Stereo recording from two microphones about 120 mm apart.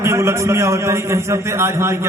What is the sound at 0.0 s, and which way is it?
A man's voice, 25° right (ahead or behind).